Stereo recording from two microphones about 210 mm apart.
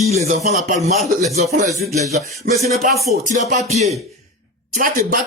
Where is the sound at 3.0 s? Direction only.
35° right (ahead or behind).